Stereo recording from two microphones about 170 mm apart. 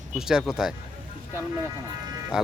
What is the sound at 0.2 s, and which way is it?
Speech, 5° right (ahead or behind).